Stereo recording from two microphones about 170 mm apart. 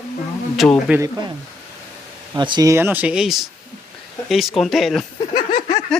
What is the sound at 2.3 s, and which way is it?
A man's voice, 25° right (ahead or behind).